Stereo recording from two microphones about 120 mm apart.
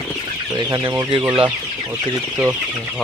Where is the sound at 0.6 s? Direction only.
35° right (ahead or behind).